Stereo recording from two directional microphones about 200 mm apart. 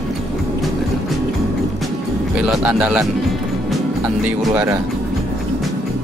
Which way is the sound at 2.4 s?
5° right (ahead or behind).